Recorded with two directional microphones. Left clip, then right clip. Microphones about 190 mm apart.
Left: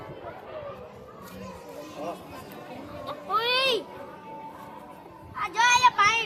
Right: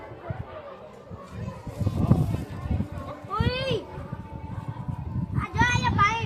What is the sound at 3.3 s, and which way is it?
Children playing, centre (ahead or behind).